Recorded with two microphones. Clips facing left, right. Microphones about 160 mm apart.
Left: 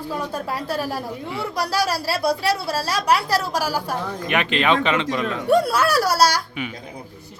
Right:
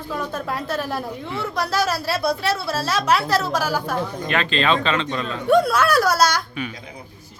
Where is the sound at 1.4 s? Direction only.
35° left (ahead or behind).